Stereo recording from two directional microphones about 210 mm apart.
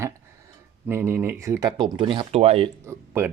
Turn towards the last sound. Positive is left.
turn(degrees=-10)  # may be behind; listen again after turning